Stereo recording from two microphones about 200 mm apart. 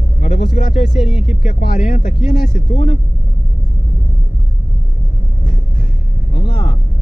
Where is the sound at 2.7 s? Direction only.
30° left (ahead or behind).